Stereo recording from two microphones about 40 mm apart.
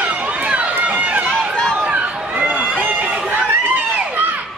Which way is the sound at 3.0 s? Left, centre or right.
Right.